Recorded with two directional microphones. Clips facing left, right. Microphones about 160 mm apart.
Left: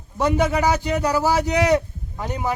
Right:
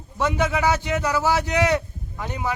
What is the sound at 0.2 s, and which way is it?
A man's voice, 35° left (ahead or behind).